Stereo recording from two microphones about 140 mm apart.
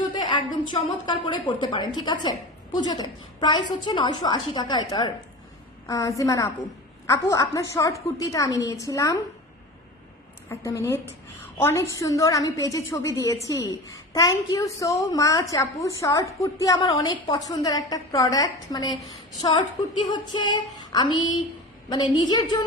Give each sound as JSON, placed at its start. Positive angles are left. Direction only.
{"t": 0.1, "sound": "a woman's voice", "side_deg": 35}
{"t": 10.5, "sound": "a woman's voice", "side_deg": 20}